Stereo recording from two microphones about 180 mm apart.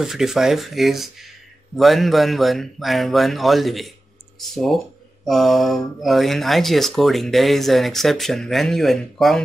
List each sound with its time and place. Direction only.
0.0 s speech: centre (ahead or behind)